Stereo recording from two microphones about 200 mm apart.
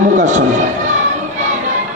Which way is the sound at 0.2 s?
40° right (ahead or behind).